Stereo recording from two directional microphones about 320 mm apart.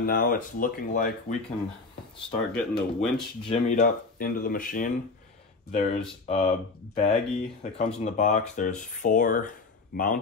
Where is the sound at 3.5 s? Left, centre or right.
Left.